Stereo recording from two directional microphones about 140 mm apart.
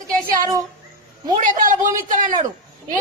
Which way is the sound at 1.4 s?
65° right (ahead or behind).